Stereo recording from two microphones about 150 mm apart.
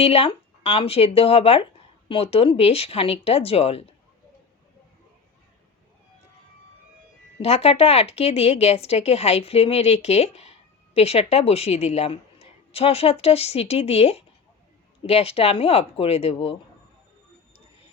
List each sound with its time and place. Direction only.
0.0 s speech: 40° left (ahead or behind)
7.3 s speech: 40° left (ahead or behind)